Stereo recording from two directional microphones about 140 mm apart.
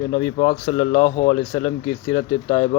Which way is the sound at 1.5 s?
30° left (ahead or behind).